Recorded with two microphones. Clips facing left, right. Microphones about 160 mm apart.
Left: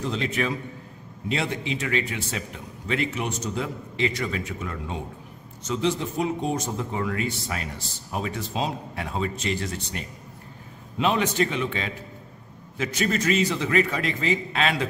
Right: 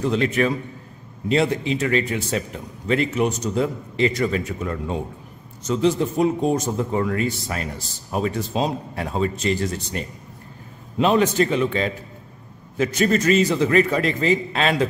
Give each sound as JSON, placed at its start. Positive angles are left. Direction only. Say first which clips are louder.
{"t": 0.0, "sound": "a man's voice", "louder": "right 7 dB", "side_deg": -55}
{"t": 1.3, "sound": "a man's voice", "louder": "right 8 dB", "side_deg": -40}